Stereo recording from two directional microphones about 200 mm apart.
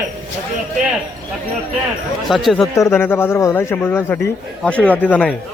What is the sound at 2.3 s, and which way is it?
Speech, centre (ahead or behind).